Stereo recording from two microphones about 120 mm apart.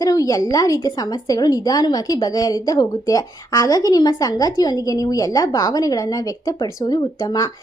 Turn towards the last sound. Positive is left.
turn(degrees=30)  # may be behind; listen again after turning